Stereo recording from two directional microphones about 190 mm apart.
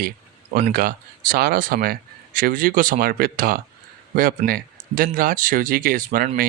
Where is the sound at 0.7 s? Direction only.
50° right (ahead or behind).